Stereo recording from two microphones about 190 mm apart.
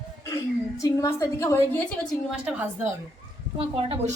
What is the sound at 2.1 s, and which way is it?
Speech, 5° right (ahead or behind).